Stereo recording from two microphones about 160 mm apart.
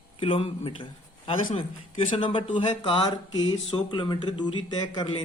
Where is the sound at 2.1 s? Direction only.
30° left (ahead or behind).